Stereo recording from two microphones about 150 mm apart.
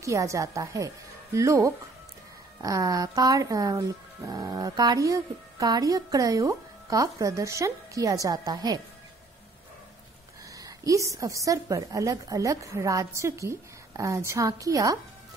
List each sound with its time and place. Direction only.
0.0 s speech: 20° right (ahead or behind)
10.5 s speech: 20° right (ahead or behind)